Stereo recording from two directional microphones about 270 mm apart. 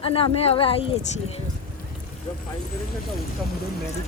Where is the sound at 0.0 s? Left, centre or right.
Centre.